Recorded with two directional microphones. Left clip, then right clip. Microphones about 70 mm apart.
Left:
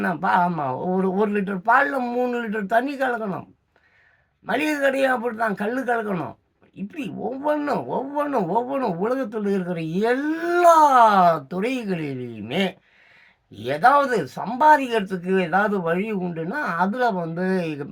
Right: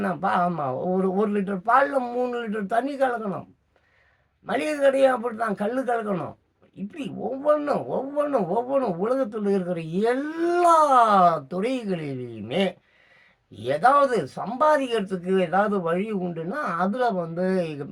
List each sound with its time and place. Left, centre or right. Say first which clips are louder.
0.0 s speech: left 3 dB; left
4.4 s speech: even; left